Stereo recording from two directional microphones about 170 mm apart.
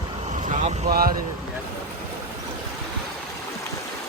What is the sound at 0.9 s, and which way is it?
Speech, 60° right (ahead or behind).